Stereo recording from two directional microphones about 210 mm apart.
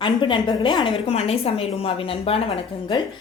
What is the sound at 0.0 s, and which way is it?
A woman's voice, 25° left (ahead or behind).